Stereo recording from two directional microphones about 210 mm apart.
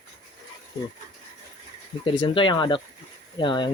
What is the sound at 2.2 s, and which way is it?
Speech, 25° left (ahead or behind).